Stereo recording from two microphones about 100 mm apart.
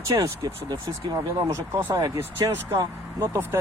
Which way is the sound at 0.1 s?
40° right (ahead or behind).